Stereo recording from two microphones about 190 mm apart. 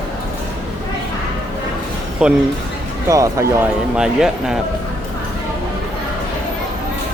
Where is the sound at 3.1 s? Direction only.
15° right (ahead or behind).